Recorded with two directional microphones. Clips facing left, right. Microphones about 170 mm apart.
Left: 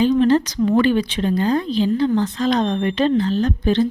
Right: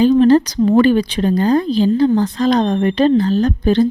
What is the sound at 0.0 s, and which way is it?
Speech, 40° right (ahead or behind).